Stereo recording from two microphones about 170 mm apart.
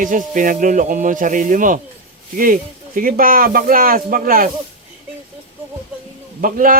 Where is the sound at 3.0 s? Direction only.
55° right (ahead or behind).